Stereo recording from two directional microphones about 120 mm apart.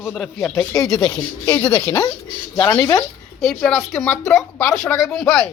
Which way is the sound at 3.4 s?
5° left (ahead or behind).